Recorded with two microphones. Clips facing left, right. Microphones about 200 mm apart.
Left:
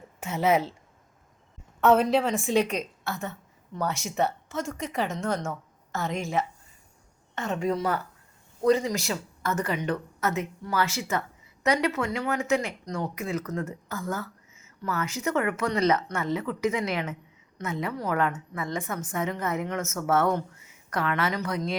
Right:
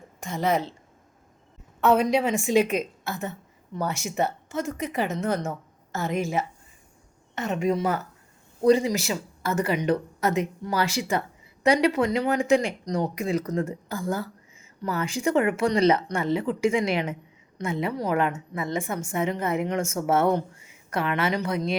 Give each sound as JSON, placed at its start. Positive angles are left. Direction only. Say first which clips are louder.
{"t": 0.2, "sound": "a woman's voice", "louder": "left 1 dB", "side_deg": 5}
{"t": 1.8, "sound": "speech", "louder": "even", "side_deg": -10}
{"t": 2.2, "sound": "speech", "louder": "right 3 dB", "side_deg": 0}
{"t": 7.3, "sound": "speech", "louder": "right 3 dB", "side_deg": -20}
{"t": 8.6, "sound": "speech", "louder": "right 3 dB", "side_deg": -10}
{"t": 11.6, "sound": "speech", "louder": "right 5 dB", "side_deg": -30}